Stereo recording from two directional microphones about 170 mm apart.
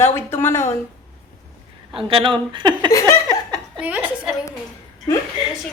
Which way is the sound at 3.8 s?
10° right (ahead or behind).